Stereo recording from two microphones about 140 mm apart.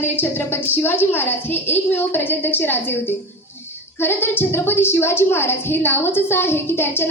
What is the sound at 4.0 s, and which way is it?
A woman's voice, 15° left (ahead or behind).